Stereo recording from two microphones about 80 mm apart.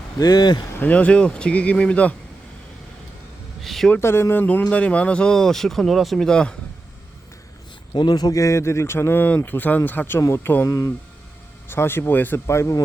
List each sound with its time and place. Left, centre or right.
0.2 s speech: left
0.8 s speech: centre
3.6 s a sound: centre
3.9 s speech: left; by 6.6 s centre
7.9 s speech: left
10.2 s speech: left
10.4 s speech: left
10.7 s speech: left
11.7 s speech: left